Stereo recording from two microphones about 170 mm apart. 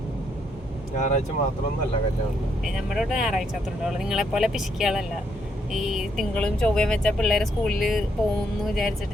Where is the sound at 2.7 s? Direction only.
Centre (ahead or behind).